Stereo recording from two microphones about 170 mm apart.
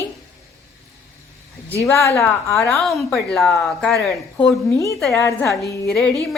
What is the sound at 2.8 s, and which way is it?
Speech, centre (ahead or behind).